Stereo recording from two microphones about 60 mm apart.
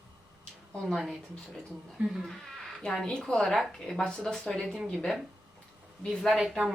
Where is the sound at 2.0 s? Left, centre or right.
Centre.